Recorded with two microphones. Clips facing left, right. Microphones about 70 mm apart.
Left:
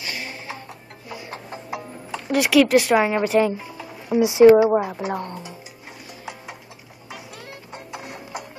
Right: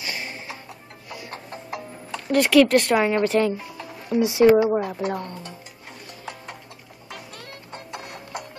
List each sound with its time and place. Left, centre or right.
0.0 s music: right
1.0 s music: centre
4.2 s a woman's voice: centre
4.7 s a woman's voice: centre
7.1 s music: centre